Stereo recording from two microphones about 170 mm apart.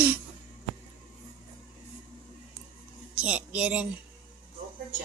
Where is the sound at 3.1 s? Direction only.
5° right (ahead or behind).